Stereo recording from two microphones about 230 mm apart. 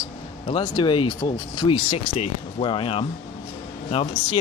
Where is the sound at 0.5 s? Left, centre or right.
Left.